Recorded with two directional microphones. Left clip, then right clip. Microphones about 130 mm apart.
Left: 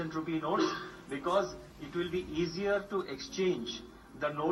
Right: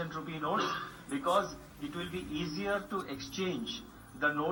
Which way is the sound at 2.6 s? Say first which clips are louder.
Left 2 dB; 35° left (ahead or behind).